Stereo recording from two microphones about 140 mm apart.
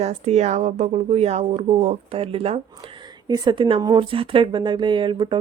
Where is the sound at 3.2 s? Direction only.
30° right (ahead or behind).